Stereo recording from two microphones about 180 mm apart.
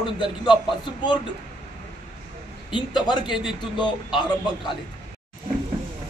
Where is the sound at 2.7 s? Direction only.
25° left (ahead or behind).